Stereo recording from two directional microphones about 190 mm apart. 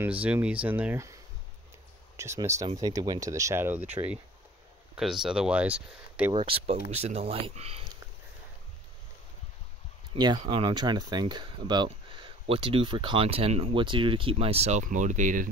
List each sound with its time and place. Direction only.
0.0 s speech: 10° right (ahead or behind)
6.3 s speech: 30° right (ahead or behind)
10.1 s speech: 20° right (ahead or behind); by 15.5 s 45° right (ahead or behind)